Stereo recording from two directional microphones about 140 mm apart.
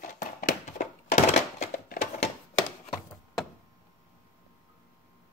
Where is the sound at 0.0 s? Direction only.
80° left.